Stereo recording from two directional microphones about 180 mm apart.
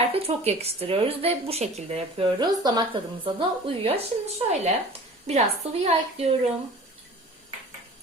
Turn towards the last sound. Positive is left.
turn(degrees=-35)  # may be behind; listen again after turning